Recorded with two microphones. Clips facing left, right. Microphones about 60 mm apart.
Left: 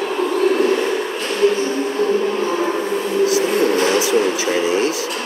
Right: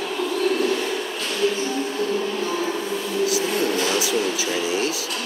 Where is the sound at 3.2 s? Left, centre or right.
Left.